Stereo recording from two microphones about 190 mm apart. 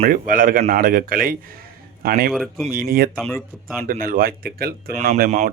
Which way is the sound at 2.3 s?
Centre (ahead or behind).